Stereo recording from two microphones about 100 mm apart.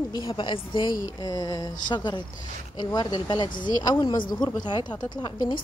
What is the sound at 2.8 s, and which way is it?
Speech, 45° left (ahead or behind).